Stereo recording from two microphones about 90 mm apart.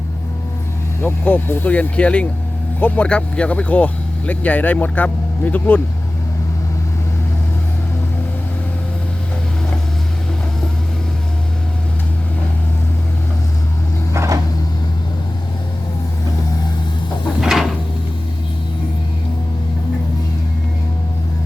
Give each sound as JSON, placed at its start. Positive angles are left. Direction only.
{"t": 1.0, "sound": "speech", "side_deg": 20}
{"t": 14.1, "sound": "a sound", "side_deg": -35}
{"t": 17.4, "sound": "drawer open or close", "side_deg": -5}